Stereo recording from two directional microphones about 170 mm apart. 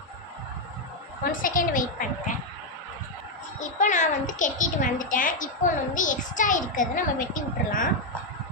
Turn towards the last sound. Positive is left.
turn(degrees=50)  # may be behind; listen again after turning